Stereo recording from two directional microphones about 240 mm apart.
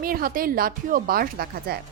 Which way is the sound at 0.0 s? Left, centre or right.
Right.